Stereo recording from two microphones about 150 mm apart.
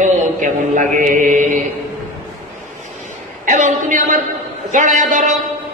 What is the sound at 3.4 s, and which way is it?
A man's voice, 55° right (ahead or behind).